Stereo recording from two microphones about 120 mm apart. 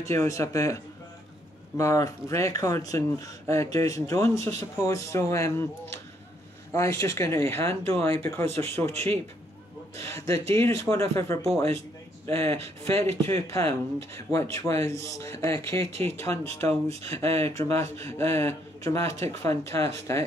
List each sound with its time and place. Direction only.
0.0 s speech: 25° left (ahead or behind)
1.8 s speech: 25° left (ahead or behind)